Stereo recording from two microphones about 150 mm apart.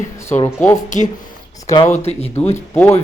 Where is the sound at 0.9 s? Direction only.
55° left (ahead or behind).